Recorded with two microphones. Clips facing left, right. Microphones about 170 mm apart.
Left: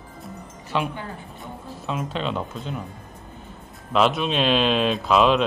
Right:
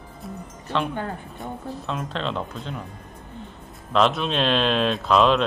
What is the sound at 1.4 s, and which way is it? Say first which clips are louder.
Speech: right 3 dB; 5° left (ahead or behind).